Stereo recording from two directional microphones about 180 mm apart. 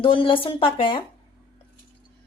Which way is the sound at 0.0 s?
30° left (ahead or behind).